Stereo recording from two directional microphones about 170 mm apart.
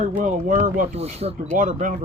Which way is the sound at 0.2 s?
55° right (ahead or behind).